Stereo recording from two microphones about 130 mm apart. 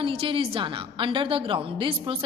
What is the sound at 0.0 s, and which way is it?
A woman's voice, 45° right (ahead or behind).